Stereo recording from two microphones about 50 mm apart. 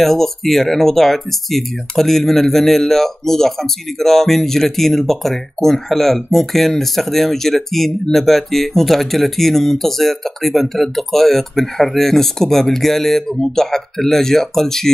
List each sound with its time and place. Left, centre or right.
0.0 s speech: centre